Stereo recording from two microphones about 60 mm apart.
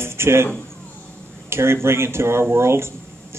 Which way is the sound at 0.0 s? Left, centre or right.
Right.